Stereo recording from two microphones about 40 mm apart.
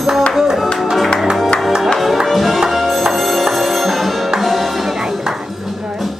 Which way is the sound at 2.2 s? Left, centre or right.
Centre.